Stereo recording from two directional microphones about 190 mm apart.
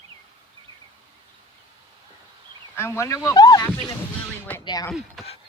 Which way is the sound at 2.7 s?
15° left (ahead or behind).